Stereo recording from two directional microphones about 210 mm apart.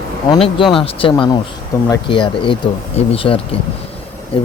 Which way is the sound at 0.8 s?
25° left (ahead or behind).